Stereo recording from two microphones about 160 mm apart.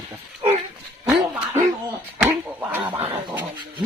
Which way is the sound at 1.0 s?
10° right (ahead or behind).